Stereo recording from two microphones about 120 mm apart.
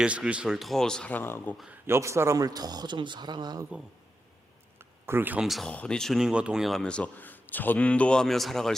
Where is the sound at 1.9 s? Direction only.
25° right (ahead or behind).